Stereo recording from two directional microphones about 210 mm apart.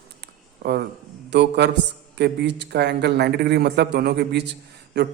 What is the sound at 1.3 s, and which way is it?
A man's voice, 55° right (ahead or behind).